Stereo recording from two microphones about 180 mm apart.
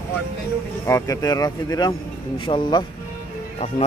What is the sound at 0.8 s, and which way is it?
Speech, 15° left (ahead or behind).